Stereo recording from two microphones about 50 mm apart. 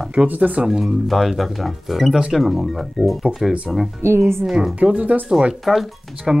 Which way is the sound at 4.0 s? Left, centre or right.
Right.